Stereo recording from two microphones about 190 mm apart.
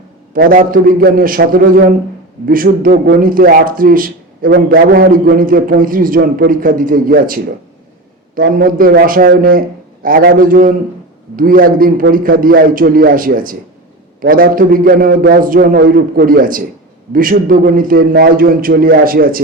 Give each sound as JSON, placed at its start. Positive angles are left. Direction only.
{"t": 0.3, "sound": "speech", "side_deg": -50}
{"t": 8.4, "sound": "a man's voice", "side_deg": -50}